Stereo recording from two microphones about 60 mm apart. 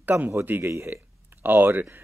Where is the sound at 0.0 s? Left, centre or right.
Right.